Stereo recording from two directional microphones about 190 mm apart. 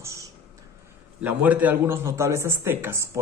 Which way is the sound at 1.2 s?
10° right (ahead or behind).